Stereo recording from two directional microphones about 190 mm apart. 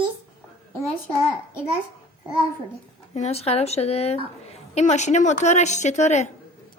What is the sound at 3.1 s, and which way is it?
A woman's voice, 35° left (ahead or behind).